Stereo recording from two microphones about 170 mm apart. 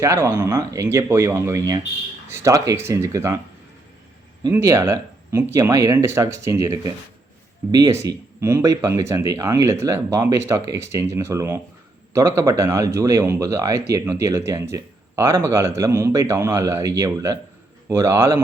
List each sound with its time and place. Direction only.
0.0 s speech: 15° right (ahead or behind)
4.5 s speech: 15° right (ahead or behind)